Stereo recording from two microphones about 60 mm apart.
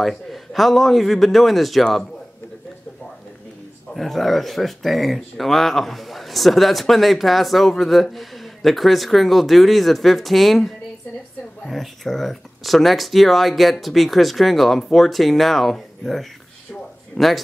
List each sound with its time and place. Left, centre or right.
0.0 s speech: centre
3.9 s speech: centre
17.2 s a man's voice: centre